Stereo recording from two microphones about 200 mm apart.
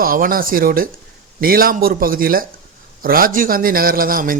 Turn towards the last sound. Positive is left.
turn(degrees=-45)  # may be behind; listen again after turning